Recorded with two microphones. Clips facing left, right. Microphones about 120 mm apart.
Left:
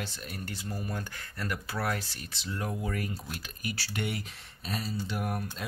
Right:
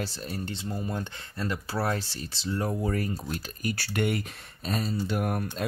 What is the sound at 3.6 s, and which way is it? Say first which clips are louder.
Speech: right 6 dB; 50° right (ahead or behind).